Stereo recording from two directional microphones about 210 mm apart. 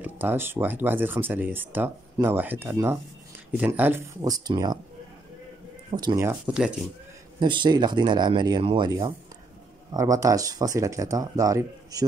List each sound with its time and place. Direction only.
0.0 s speech: 10° right (ahead or behind)
5.9 s speech: 20° right (ahead or behind)
7.3 s speech: 20° right (ahead or behind)